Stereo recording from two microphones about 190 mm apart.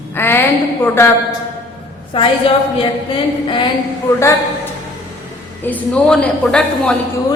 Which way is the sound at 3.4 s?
25° left (ahead or behind).